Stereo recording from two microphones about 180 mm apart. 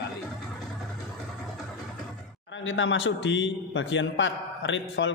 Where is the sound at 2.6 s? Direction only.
90° left.